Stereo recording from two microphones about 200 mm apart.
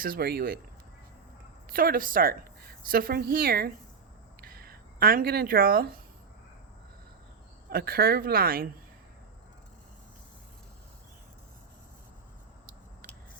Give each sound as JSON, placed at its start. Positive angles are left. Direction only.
{"t": 0.0, "sound": "a woman's voice", "side_deg": -50}
{"t": 1.7, "sound": "a woman's voice", "side_deg": -45}
{"t": 4.4, "sound": "a sound", "side_deg": -50}
{"t": 7.7, "sound": "a woman's voice", "side_deg": -50}